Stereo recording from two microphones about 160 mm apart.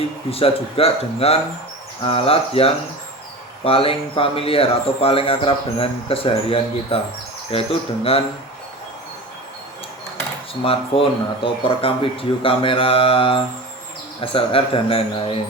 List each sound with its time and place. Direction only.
0.3 s speech: 35° left (ahead or behind)
10.5 s speech: 35° left (ahead or behind)